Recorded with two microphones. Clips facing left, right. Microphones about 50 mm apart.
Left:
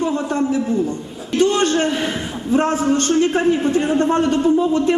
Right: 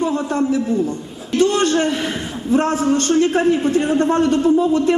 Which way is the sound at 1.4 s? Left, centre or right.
Left.